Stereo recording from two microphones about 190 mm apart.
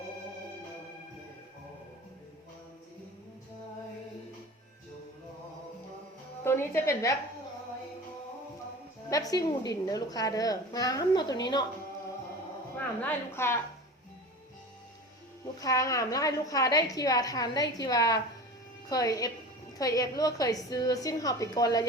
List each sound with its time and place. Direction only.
6.4 s a woman's voice: 10° left (ahead or behind)
9.0 s a woman's voice: 20° left (ahead or behind)
13.0 s a woman's voice: 10° left (ahead or behind)
15.6 s a woman's voice: 15° left (ahead or behind)